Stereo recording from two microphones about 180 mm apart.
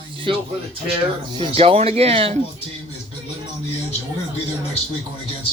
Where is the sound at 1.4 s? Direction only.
30° right (ahead or behind).